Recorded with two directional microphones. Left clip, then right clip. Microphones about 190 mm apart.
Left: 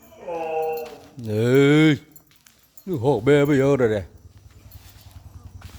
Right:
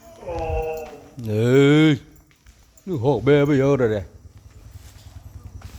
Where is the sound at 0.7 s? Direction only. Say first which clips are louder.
Left 1 dB; 10° left (ahead or behind).